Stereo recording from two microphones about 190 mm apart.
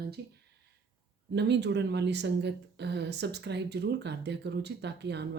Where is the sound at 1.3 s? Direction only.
65° right (ahead or behind).